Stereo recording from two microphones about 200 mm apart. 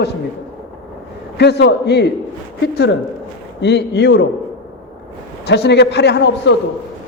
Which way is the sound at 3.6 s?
60° left (ahead or behind).